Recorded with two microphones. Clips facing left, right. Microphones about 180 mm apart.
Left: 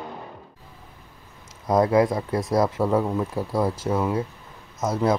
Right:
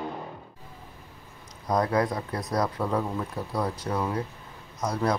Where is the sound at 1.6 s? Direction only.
25° left (ahead or behind).